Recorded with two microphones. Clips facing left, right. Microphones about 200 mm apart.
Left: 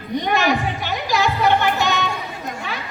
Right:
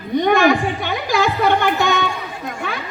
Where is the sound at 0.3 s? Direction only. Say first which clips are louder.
Right 5 dB; 50° right (ahead or behind).